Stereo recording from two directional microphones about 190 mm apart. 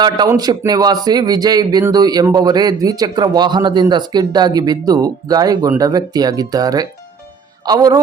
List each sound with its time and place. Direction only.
0.0 s speech: 20° right (ahead or behind)